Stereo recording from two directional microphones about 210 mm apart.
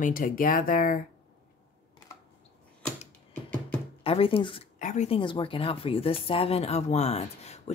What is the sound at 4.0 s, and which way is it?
Speech, 25° left (ahead or behind).